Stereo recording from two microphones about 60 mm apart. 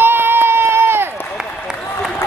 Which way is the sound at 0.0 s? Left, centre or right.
Right.